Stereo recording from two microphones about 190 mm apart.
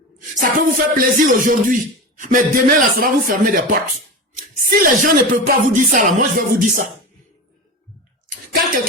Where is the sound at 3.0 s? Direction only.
45° right (ahead or behind).